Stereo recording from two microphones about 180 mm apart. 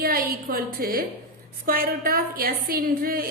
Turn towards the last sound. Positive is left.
turn(degrees=-55)  # may be behind; listen again after turning